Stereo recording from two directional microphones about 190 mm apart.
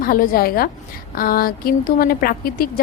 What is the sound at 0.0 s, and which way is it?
A woman's voice, 50° left (ahead or behind).